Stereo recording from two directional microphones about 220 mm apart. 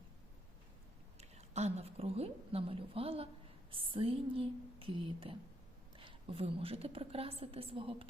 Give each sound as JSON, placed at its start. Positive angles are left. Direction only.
{"t": 1.4, "sound": "a woman's voice", "side_deg": -30}